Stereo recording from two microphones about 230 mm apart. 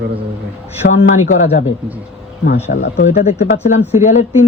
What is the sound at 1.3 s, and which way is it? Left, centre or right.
Speech, left.